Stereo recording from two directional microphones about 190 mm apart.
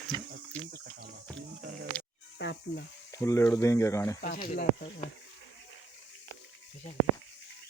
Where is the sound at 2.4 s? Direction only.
65° left (ahead or behind).